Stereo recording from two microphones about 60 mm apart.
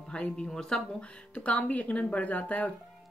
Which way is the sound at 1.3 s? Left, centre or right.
Left.